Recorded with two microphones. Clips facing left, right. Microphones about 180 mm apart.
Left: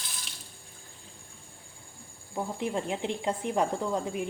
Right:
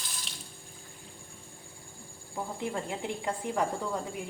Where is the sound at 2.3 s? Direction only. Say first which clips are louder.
Left 3 dB; 20° left (ahead or behind).